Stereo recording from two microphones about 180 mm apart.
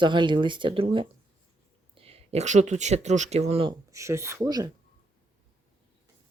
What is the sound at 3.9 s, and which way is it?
Speech, 15° right (ahead or behind).